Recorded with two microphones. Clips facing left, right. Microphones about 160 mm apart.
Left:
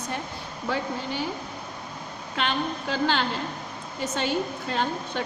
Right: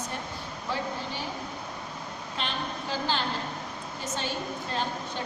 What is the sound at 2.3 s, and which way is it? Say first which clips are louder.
A woman's voice: left 7 dB; 70° left (ahead or behind).